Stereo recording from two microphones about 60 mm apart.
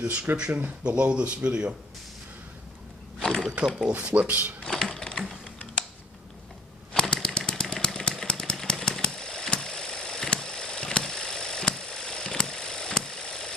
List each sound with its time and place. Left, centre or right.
0.6 s speech: right
3.3 s a sound: centre
3.6 s speech: centre
3.9 s speech: right
4.6 s typing: centre
6.9 s typewriter: centre
7.6 s a sound: centre
8.5 s engine: centre